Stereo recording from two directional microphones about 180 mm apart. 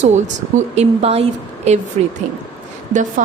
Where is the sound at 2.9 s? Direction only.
45° right (ahead or behind).